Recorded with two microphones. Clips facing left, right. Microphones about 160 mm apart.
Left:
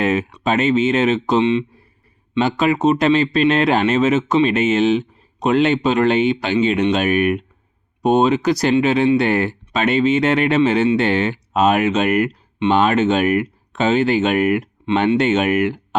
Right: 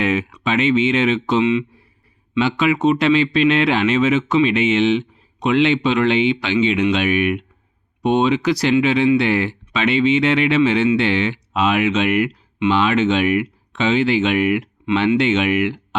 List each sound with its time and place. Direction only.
0.0 s speech: 40° left (ahead or behind)